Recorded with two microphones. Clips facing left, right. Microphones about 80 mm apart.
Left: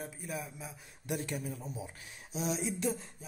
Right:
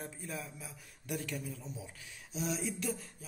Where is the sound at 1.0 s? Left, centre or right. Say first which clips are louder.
Left 3 dB; left.